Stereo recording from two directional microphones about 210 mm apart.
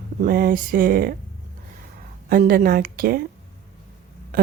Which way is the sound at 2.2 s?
45° right (ahead or behind).